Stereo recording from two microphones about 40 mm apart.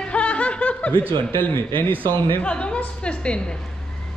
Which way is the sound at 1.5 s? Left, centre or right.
Left.